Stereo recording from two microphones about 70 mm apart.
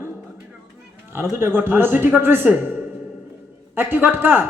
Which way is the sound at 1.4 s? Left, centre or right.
Right.